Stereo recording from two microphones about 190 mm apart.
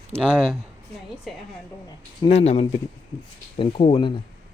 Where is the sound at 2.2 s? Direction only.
30° left (ahead or behind).